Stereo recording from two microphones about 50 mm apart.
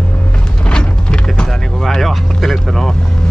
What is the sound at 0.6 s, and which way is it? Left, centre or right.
Music, centre.